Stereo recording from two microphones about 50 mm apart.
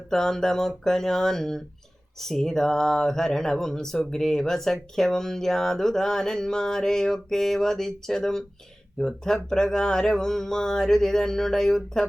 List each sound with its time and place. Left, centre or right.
0.1 s speech: centre